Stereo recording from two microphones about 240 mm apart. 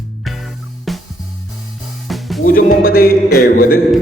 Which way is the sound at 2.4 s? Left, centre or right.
Left.